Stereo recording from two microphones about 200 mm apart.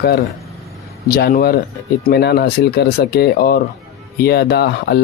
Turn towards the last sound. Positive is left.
turn(degrees=55)  # may be behind; listen again after turning